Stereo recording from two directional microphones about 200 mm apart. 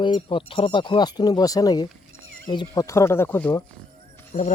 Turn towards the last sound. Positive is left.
turn(degrees=35)  # may be behind; listen again after turning